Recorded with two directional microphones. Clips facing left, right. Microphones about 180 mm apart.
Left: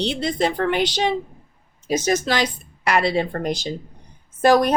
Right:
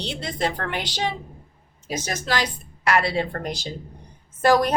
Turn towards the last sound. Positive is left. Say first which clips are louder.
# left 3 dB
turn(degrees=20)  # may be behind; listen again after turning